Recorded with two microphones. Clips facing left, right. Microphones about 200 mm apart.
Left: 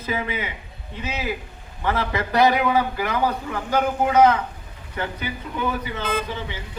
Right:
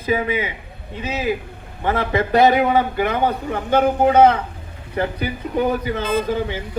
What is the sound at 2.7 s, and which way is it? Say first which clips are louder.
A man's voice: right 4 dB; 25° right (ahead or behind).